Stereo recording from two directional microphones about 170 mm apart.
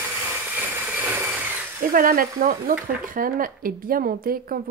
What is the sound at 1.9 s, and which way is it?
Speech, 55° right (ahead or behind).